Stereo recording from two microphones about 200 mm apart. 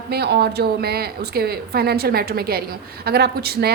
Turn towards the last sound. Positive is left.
turn(degrees=-50)  # may be behind; listen again after turning